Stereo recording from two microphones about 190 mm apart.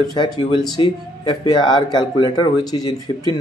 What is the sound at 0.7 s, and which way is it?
Speech, 20° left (ahead or behind).